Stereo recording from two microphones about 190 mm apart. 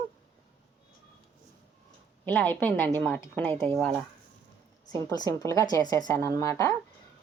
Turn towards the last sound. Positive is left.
turn(degrees=15)  # may be behind; listen again after turning